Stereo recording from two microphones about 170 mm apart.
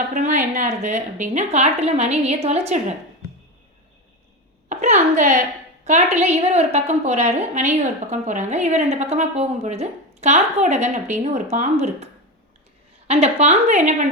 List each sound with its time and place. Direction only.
0.1 s a woman's voice: 50° right (ahead or behind)
4.7 s a woman's voice: 45° right (ahead or behind)
13.1 s a woman's voice: 40° right (ahead or behind)